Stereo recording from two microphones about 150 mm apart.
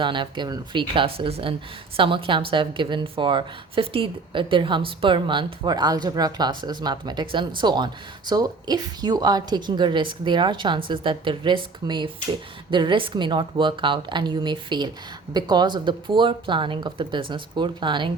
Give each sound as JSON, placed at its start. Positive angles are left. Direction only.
{"t": 0.0, "sound": "a woman's voice", "side_deg": -30}